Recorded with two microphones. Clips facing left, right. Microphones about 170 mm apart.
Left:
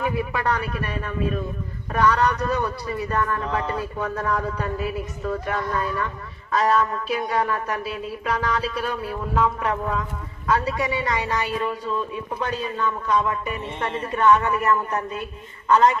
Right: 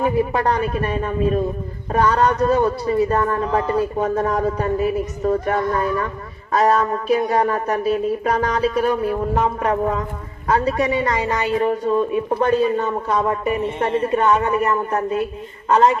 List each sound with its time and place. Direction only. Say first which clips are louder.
0.0 s a man's voice: right 6 dB; 40° right (ahead or behind)
1.9 s a sound: right 3 dB; 25° right (ahead or behind)
2.9 s speech: right 5 dB; 35° right (ahead or behind)
14.8 s speech: right 6 dB; 45° right (ahead or behind)